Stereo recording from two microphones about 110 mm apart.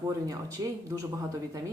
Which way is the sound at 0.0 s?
30° right (ahead or behind).